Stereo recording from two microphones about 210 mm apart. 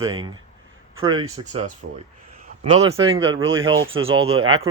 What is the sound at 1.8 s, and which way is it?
Speech, 50° right (ahead or behind).